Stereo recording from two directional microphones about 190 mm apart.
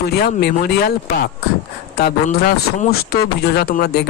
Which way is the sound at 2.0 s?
55° left (ahead or behind).